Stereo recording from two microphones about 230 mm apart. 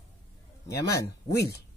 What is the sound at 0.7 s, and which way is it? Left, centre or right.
Speech, left.